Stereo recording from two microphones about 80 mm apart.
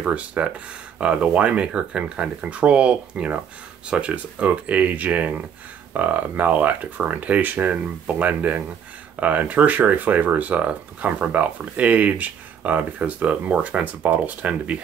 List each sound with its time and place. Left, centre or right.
0.0 s speech: centre